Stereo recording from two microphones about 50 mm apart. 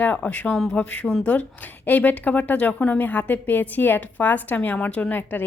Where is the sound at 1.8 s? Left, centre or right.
Left.